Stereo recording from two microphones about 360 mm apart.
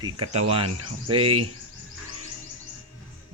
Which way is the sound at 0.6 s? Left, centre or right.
Right.